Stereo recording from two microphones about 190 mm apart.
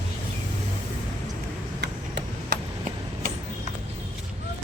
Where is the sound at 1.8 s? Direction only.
60° right (ahead or behind).